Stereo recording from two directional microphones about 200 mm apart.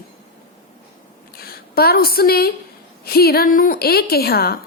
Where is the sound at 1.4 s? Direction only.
50° left (ahead or behind).